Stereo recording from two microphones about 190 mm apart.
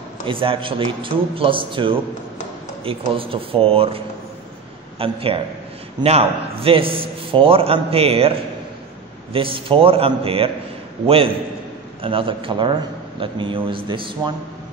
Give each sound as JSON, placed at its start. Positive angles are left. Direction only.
{"t": 0.2, "sound": "a man's voice", "side_deg": -25}